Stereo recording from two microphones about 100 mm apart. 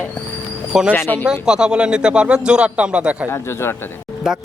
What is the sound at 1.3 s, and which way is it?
Speech, 10° right (ahead or behind).